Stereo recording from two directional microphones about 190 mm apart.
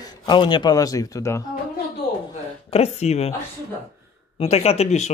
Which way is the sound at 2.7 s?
35° left (ahead or behind).